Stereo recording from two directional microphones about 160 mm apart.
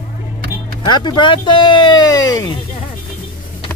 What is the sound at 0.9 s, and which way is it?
Speech, 30° left (ahead or behind).